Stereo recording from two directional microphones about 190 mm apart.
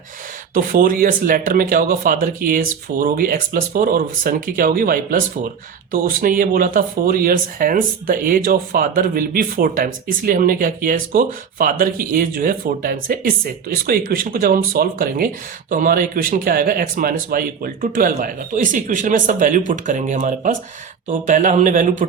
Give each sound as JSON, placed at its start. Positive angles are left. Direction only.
{"t": 0.5, "sound": "a man's voice", "side_deg": -45}